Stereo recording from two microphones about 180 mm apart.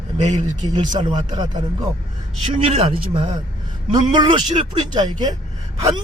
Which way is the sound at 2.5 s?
30° right (ahead or behind).